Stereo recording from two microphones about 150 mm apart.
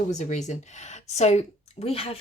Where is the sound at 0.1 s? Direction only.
50° left (ahead or behind).